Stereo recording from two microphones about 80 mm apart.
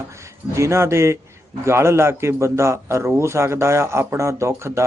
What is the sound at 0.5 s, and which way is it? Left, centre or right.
A man's voice, right.